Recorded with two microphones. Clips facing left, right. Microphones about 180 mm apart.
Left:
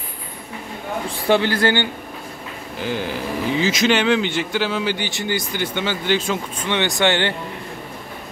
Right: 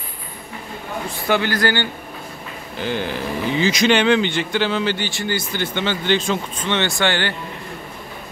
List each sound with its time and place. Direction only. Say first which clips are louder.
1.1 s a man's voice: left 2 dB; 30° left (ahead or behind)
2.8 s speech: right 1 dB; 5° left (ahead or behind); by 7.3 s 20° left (ahead or behind)